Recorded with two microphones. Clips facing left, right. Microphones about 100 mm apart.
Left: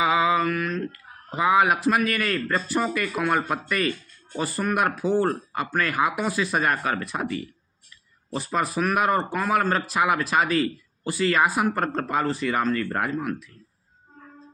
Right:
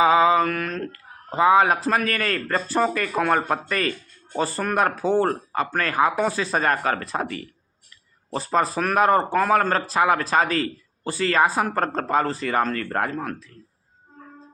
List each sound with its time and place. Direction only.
0.0 s mantra: 30° right (ahead or behind)
1.3 s speech: 35° right (ahead or behind)